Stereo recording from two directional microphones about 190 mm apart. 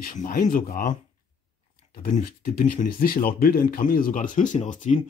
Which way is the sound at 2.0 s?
45° left (ahead or behind).